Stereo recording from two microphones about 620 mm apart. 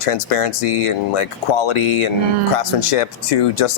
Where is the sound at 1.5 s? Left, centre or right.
Left.